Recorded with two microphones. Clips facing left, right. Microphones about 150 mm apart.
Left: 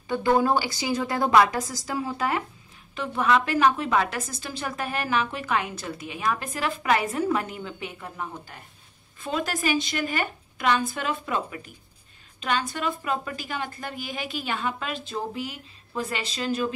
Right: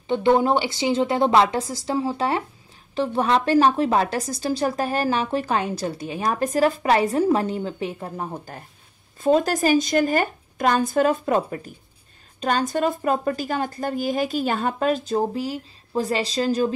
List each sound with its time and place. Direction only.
0.1 s a woman's voice: 25° right (ahead or behind)